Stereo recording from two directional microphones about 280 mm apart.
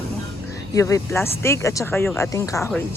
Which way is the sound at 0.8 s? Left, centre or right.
Centre.